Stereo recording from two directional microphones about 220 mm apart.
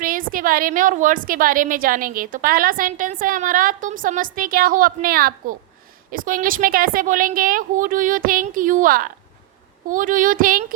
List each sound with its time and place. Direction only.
0.0 s a woman's voice: 40° right (ahead or behind)